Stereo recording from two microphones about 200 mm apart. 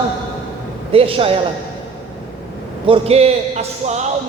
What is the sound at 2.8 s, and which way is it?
Speech, 30° right (ahead or behind).